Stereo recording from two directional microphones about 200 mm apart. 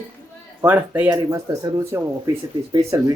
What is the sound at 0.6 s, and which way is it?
Speech, 10° right (ahead or behind).